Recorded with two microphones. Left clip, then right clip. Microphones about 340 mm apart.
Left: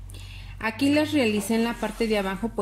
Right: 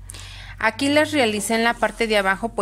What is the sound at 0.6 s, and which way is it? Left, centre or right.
A woman's voice, right.